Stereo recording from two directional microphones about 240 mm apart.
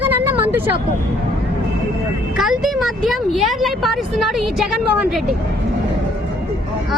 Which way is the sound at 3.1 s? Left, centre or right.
Centre.